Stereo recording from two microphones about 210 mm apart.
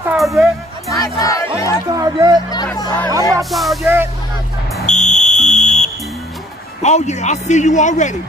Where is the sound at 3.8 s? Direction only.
10° right (ahead or behind).